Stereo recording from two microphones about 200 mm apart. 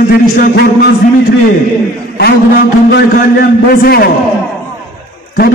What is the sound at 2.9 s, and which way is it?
A man's voice, 45° left (ahead or behind).